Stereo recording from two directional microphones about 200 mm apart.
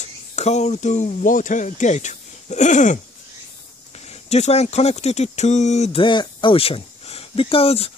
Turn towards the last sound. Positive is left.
turn(degrees=30)  # may be behind; listen again after turning